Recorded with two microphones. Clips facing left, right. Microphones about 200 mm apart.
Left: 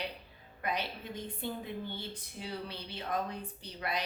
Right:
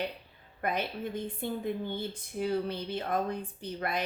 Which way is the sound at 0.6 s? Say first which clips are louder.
Right 5 dB; 50° right (ahead or behind).